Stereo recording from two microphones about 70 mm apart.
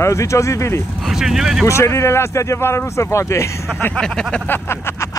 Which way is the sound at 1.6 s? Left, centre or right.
Left.